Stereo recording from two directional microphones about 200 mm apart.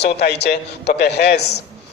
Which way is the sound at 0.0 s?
55° left (ahead or behind).